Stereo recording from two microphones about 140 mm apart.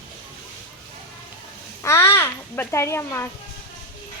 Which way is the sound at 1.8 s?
20° left (ahead or behind).